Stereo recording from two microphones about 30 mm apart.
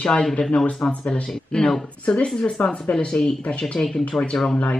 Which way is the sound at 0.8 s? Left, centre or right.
Left.